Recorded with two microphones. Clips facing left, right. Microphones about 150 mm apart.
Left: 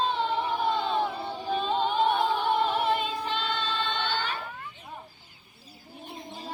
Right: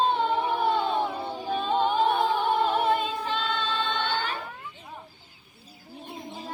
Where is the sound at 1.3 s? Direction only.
15° right (ahead or behind).